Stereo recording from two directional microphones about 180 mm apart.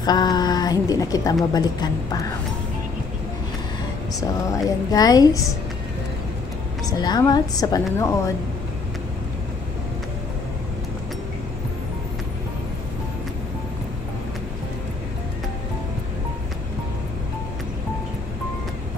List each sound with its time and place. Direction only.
0.0 s a woman's voice: 20° left (ahead or behind)
4.5 s a woman's voice: 20° left (ahead or behind)
6.9 s a woman's voice: 20° left (ahead or behind)